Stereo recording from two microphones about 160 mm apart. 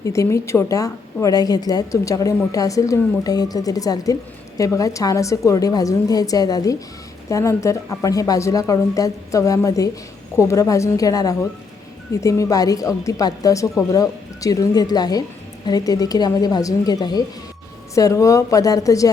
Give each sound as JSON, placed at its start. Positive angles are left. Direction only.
{"t": 0.0, "sound": "a woman's voice", "side_deg": 20}